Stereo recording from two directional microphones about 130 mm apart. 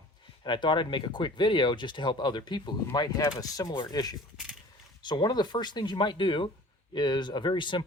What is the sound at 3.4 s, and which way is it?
Speech, 30° left (ahead or behind).